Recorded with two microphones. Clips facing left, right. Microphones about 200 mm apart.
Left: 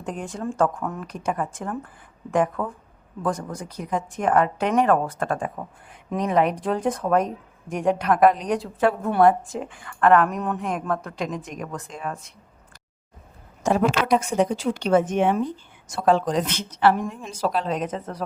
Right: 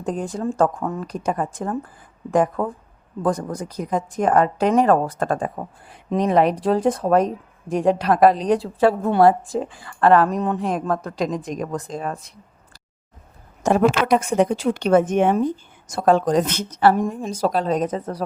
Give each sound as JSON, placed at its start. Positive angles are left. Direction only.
{"t": 0.0, "sound": "speech", "side_deg": -35}
{"t": 13.7, "sound": "a woman's voice", "side_deg": -50}